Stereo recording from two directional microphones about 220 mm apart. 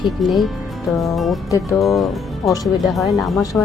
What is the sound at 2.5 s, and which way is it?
Speech, 15° left (ahead or behind).